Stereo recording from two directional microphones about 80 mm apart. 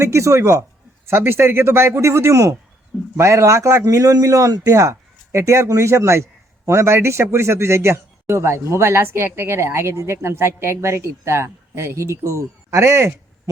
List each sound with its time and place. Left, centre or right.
0.0 s a man's voice: right
1.0 s a man's voice: right